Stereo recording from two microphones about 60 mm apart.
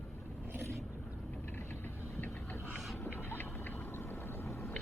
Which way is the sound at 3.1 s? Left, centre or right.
Left.